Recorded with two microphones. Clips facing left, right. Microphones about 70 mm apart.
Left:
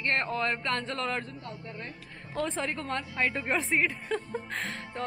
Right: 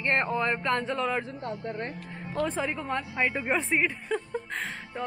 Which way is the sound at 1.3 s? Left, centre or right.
Right.